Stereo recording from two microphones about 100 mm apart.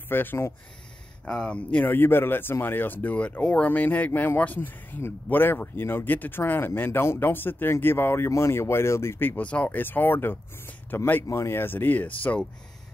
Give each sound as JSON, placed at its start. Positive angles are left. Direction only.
{"t": 0.1, "sound": "speech", "side_deg": 20}
{"t": 1.2, "sound": "speech", "side_deg": 10}